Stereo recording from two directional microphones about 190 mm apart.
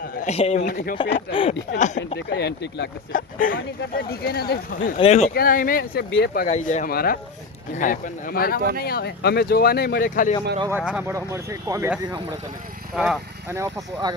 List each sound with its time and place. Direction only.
0.2 s speech: 35° left (ahead or behind)
1.1 s speech: 30° left (ahead or behind)
2.1 s speech: 60° left (ahead or behind)
3.1 s speech: 45° left (ahead or behind)
4.9 s speech: 35° left (ahead or behind)
5.3 s speech: 50° left (ahead or behind)
6.1 s speech: 65° left (ahead or behind)
6.5 s speech: 40° left (ahead or behind)
10.7 s speech: 5° right (ahead or behind)
13.5 s speech: 15° right (ahead or behind)